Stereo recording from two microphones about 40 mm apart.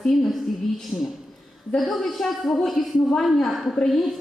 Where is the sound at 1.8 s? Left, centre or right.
Centre.